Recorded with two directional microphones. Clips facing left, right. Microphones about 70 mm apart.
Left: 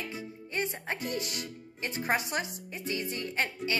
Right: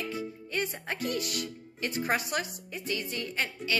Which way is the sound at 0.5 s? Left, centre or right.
Left.